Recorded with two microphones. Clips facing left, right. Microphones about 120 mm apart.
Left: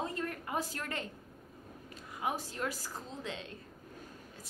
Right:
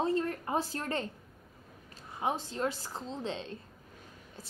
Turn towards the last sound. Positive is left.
turn(degrees=-30)  # may be behind; listen again after turning